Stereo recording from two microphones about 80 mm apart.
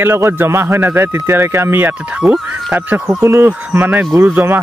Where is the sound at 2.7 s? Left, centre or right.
Right.